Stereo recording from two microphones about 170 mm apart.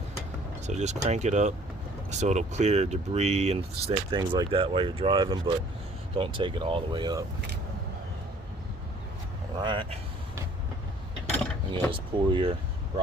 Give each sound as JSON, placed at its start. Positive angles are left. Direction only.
{"t": 0.7, "sound": "speech", "side_deg": -40}
{"t": 4.1, "sound": "speech", "side_deg": -25}
{"t": 9.6, "sound": "speech", "side_deg": -30}
{"t": 11.7, "sound": "speech", "side_deg": -30}